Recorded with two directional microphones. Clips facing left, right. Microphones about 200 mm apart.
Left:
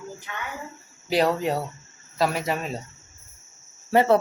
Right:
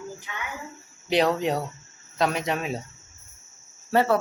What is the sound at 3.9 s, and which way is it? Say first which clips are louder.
Cricket: left 3 dB; 25° left (ahead or behind).